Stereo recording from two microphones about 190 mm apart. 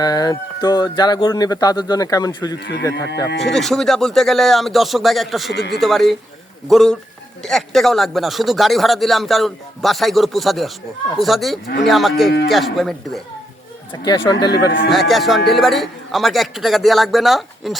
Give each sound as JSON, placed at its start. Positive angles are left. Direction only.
{"t": 0.0, "sound": "speech", "side_deg": 20}
{"t": 2.6, "sound": "speech", "side_deg": 60}
{"t": 3.3, "sound": "speech", "side_deg": 0}
{"t": 13.9, "sound": "speech", "side_deg": 25}
{"t": 14.8, "sound": "speech", "side_deg": 0}